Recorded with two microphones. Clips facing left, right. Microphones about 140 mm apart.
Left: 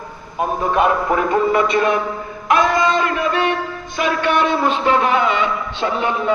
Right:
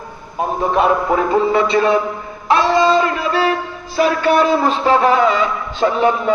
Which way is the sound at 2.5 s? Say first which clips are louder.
Right 3 dB; 30° right (ahead or behind).